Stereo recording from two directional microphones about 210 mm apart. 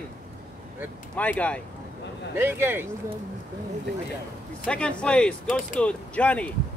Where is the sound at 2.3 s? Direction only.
10° right (ahead or behind).